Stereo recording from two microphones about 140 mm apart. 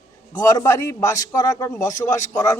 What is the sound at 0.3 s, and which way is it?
A man's voice, 25° left (ahead or behind).